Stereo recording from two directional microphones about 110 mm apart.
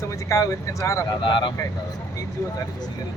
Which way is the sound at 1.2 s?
45° left (ahead or behind).